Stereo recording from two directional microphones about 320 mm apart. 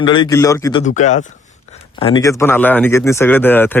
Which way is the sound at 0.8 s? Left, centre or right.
Left.